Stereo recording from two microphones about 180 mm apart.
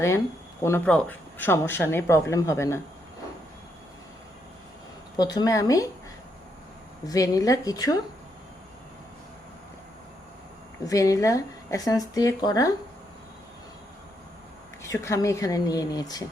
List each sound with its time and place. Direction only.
0.6 s speech: 10° left (ahead or behind)
5.1 s speech: 20° left (ahead or behind)
7.0 s speech: 20° left (ahead or behind)
10.8 s speech: 20° left (ahead or behind)
14.8 s speech: 15° left (ahead or behind)